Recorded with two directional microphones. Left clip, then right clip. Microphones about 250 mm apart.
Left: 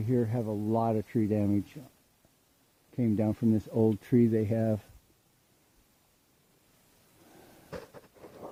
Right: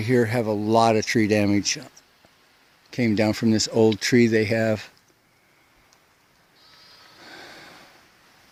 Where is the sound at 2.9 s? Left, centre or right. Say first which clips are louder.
Right 9 dB; centre.